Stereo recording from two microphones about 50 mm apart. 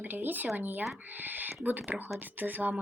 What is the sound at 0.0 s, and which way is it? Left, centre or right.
Speech, right.